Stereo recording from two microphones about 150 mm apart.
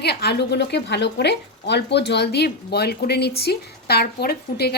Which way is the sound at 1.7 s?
90° left.